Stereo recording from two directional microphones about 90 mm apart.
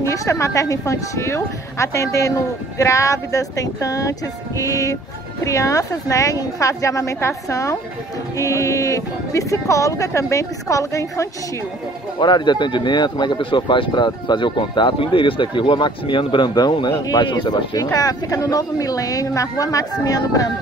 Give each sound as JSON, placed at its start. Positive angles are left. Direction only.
{"t": 0.0, "sound": "speech", "side_deg": 35}
{"t": 12.2, "sound": "speech", "side_deg": 55}
{"t": 17.9, "sound": "speech", "side_deg": 45}